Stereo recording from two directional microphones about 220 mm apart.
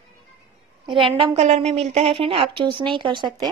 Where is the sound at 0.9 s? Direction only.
25° right (ahead or behind).